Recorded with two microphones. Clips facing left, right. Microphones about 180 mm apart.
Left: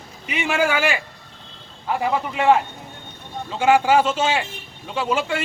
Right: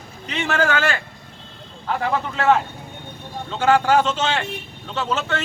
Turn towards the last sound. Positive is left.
turn(degrees=10)  # may be behind; listen again after turning